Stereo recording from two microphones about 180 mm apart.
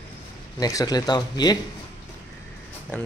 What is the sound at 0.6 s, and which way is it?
Speech, 20° left (ahead or behind).